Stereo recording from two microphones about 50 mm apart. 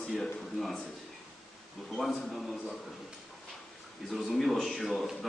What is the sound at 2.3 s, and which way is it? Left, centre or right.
Speech, centre.